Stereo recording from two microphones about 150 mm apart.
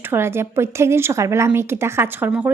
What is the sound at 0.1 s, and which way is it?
Speech, 15° right (ahead or behind).